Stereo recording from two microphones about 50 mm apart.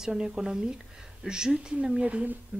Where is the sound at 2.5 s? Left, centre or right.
Right.